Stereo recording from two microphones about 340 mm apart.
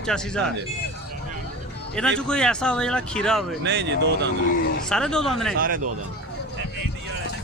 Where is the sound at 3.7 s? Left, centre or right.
Right.